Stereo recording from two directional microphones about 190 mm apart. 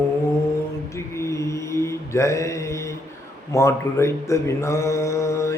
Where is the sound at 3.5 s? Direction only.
15° left (ahead or behind).